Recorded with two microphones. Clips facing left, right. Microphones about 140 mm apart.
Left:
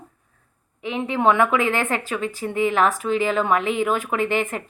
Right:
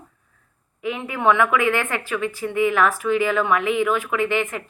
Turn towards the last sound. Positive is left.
turn(degrees=35)  # may be behind; listen again after turning